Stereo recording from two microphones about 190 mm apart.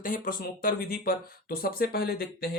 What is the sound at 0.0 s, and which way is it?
Speech, 45° left (ahead or behind).